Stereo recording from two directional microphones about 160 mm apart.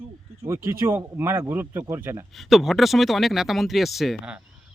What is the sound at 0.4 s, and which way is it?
Speech, 15° right (ahead or behind).